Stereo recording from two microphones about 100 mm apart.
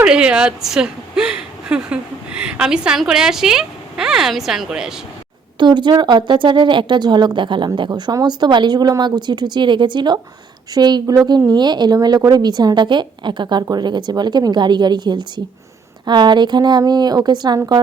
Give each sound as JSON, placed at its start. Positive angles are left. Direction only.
{"t": 0.0, "sound": "speech", "side_deg": -10}
{"t": 5.5, "sound": "a woman's voice", "side_deg": -50}
{"t": 7.9, "sound": "a woman's voice", "side_deg": -40}